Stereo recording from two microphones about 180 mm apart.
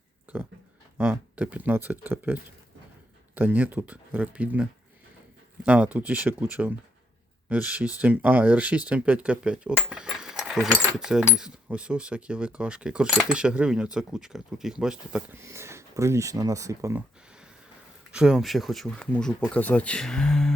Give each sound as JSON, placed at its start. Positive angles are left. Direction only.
{"t": 0.3, "sound": "speech", "side_deg": -10}
{"t": 10.8, "sound": "mechanisms", "side_deg": -5}
{"t": 15.4, "sound": "speech", "side_deg": -15}
{"t": 18.1, "sound": "mechanisms", "side_deg": -5}